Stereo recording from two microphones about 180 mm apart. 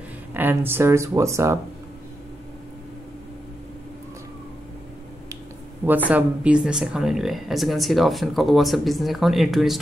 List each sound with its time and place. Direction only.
0.3 s speech: 10° right (ahead or behind)
5.9 s speech: 10° right (ahead or behind)